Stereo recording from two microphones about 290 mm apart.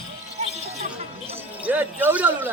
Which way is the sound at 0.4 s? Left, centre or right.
Right.